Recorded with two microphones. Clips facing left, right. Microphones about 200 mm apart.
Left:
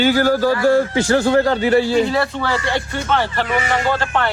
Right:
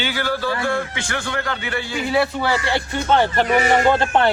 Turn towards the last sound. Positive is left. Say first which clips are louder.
# right 3 dB
turn(degrees=-20)  # may be behind; listen again after turning